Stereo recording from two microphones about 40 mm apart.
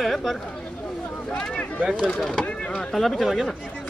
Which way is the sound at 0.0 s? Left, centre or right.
Centre.